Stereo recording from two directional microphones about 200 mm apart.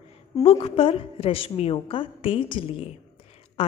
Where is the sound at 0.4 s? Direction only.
30° left (ahead or behind).